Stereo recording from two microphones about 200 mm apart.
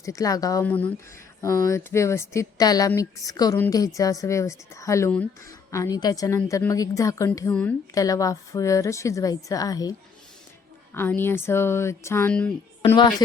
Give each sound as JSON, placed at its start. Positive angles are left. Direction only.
{"t": 0.0, "sound": "speech", "side_deg": 15}
{"t": 10.9, "sound": "speech", "side_deg": 10}
{"t": 13.0, "sound": "speech", "side_deg": 20}